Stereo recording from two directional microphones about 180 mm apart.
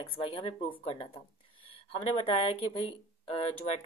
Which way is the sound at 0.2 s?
30° left (ahead or behind).